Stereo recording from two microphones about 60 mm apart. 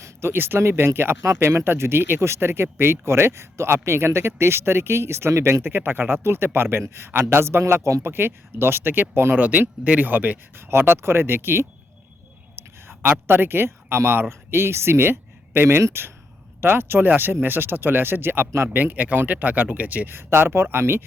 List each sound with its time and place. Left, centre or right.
0.0 s speech: right
8.0 s speech: right
18.7 s speech: right
20.1 s speech: right